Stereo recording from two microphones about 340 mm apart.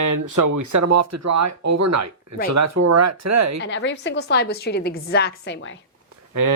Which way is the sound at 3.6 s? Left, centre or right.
Left.